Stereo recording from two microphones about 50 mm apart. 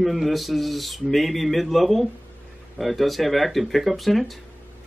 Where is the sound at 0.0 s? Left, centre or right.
Centre.